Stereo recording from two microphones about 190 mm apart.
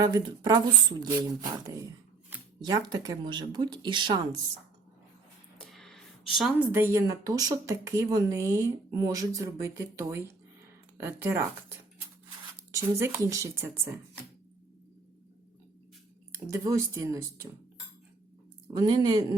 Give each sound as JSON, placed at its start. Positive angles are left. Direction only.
{"t": 0.0, "sound": "speech", "side_deg": -20}
{"t": 5.7, "sound": "speech", "side_deg": 0}
{"t": 12.7, "sound": "speech", "side_deg": -15}
{"t": 16.5, "sound": "speech", "side_deg": -15}
{"t": 18.8, "sound": "speech", "side_deg": -20}